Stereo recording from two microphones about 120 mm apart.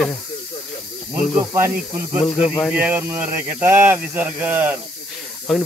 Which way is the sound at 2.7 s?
15° right (ahead or behind).